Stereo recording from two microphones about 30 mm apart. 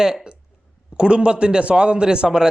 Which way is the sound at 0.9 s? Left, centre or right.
Right.